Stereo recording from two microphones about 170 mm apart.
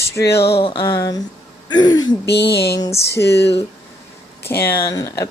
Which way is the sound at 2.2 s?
80° left.